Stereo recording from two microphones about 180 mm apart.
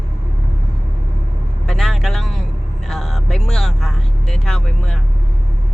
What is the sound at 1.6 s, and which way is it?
Vehicle, centre (ahead or behind).